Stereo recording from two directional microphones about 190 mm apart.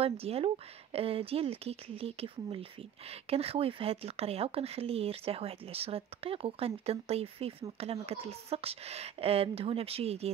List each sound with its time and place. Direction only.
0.0 s speech: 30° right (ahead or behind)